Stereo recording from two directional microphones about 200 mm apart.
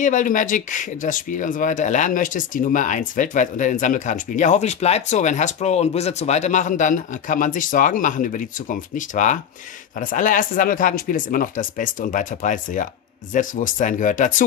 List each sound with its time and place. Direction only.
0.0 s speech: 40° left (ahead or behind)